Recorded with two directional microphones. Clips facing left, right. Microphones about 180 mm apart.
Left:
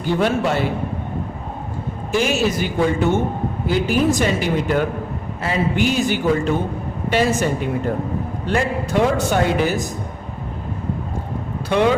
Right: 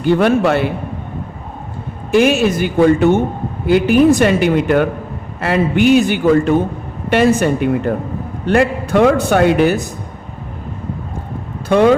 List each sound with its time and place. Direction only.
0.0 s a man's voice: 60° right (ahead or behind)
2.1 s a man's voice: 60° right (ahead or behind)
11.7 s speech: 50° right (ahead or behind)